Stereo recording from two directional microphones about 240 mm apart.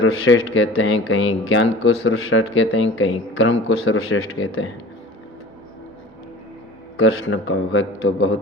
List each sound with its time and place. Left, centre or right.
0.0 s speech: left
7.0 s a man's voice: left